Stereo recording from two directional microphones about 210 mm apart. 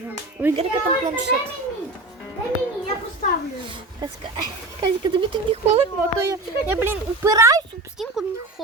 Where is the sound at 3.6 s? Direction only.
20° right (ahead or behind).